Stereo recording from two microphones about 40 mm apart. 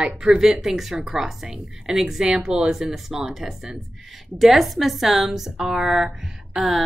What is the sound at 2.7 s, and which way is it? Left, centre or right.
A woman's voice, centre.